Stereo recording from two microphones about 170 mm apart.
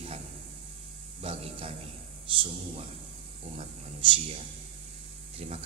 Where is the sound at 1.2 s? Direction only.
35° right (ahead or behind).